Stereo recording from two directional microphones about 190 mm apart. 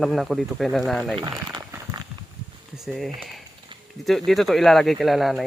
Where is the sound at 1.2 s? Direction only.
20° right (ahead or behind).